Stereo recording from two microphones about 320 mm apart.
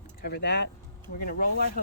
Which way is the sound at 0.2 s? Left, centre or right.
Left.